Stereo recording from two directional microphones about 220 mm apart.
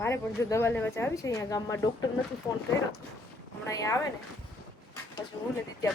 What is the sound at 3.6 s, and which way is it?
Speech, 15° left (ahead or behind).